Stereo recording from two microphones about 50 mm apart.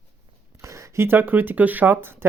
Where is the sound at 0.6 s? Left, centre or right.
Right.